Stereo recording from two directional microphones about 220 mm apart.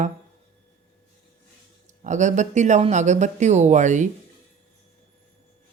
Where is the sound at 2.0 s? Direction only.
35° right (ahead or behind).